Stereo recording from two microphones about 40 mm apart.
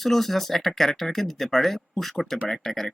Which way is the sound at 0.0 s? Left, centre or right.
Centre.